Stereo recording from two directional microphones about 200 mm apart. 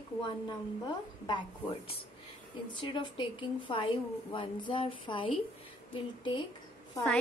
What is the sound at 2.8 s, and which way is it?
A woman's voice, 25° left (ahead or behind).